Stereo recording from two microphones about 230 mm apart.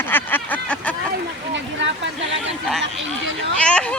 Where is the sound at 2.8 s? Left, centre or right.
Right.